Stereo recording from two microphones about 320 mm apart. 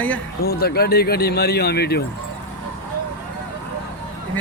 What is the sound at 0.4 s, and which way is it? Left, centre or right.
Speech, left.